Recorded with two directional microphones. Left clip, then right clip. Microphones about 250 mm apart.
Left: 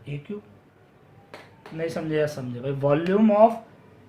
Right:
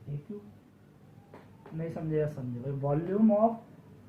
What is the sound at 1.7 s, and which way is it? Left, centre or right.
Speech, left.